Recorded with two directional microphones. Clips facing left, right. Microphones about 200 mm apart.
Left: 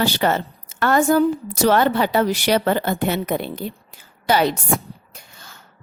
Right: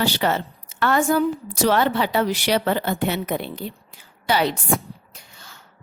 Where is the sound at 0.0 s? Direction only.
50° left (ahead or behind).